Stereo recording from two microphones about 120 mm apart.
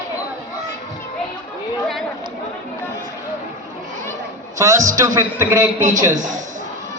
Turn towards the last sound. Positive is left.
turn(degrees=-90)